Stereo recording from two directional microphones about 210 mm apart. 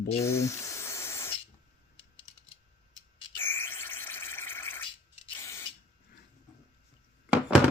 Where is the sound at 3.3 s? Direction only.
10° left (ahead or behind).